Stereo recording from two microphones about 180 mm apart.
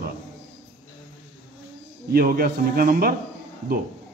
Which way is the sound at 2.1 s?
55° right (ahead or behind).